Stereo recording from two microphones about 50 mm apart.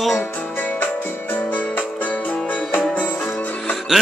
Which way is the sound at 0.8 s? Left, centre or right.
Left.